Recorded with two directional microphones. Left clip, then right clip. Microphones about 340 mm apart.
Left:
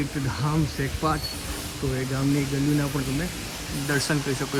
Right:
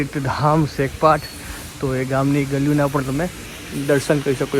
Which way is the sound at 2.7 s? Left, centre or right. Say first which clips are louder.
Right 9 dB; right.